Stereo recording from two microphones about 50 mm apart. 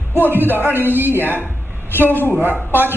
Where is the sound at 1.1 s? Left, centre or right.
Left.